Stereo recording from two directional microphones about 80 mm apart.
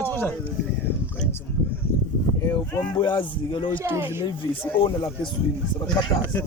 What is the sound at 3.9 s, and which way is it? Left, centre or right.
Speech, right.